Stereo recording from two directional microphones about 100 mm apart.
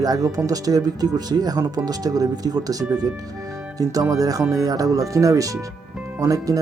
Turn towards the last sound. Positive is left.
turn(degrees=-35)  # may be behind; listen again after turning